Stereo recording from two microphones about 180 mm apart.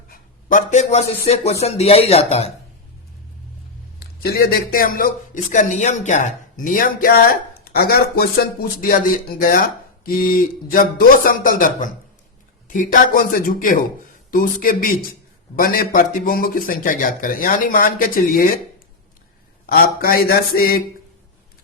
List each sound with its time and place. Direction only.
0.1 s a sound: 45° left (ahead or behind)
1.3 s speech: 35° left (ahead or behind)
4.0 s a man's voice: 60° left (ahead or behind)
19.6 s a man's voice: 55° left (ahead or behind)